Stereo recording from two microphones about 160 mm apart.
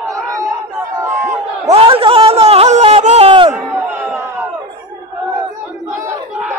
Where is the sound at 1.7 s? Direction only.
35° right (ahead or behind).